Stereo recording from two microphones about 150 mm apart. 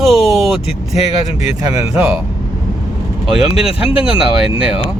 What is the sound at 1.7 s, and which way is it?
Speech, 20° right (ahead or behind).